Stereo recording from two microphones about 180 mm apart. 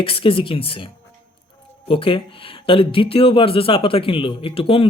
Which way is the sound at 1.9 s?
30° left (ahead or behind).